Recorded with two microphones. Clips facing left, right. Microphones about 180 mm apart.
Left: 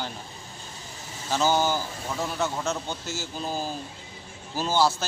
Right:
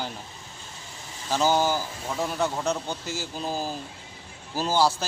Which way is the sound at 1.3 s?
10° right (ahead or behind).